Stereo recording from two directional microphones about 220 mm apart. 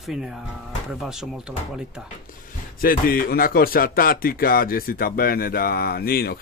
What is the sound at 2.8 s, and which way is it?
Speech, 40° left (ahead or behind).